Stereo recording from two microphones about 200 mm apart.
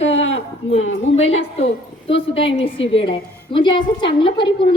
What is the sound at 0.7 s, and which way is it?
A woman's voice, 30° left (ahead or behind).